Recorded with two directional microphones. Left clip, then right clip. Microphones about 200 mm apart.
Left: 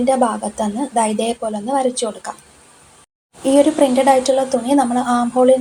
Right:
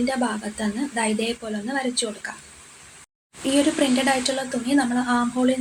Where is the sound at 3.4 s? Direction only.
15° left (ahead or behind).